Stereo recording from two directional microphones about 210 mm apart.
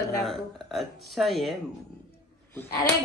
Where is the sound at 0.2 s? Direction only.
Centre (ahead or behind).